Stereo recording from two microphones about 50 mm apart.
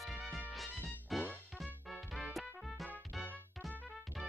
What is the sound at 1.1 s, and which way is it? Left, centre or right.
Music, centre.